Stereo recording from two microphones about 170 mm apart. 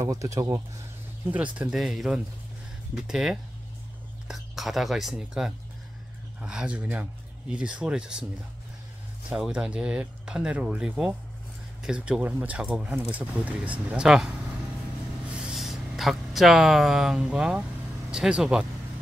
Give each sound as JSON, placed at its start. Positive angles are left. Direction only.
{"t": 0.0, "sound": "speech", "side_deg": -20}
{"t": 1.2, "sound": "speech", "side_deg": -10}
{"t": 9.3, "sound": "speech", "side_deg": -5}
{"t": 15.3, "sound": "speech", "side_deg": -5}